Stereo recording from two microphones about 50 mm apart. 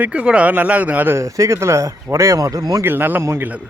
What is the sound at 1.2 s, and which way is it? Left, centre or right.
Speech, right.